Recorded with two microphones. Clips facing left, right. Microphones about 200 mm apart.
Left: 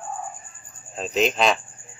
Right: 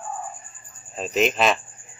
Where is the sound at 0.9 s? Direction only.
Centre (ahead or behind).